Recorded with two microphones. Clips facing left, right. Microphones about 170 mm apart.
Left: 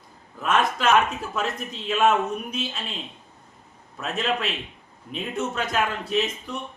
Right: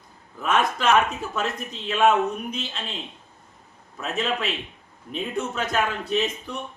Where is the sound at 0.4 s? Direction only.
Centre (ahead or behind).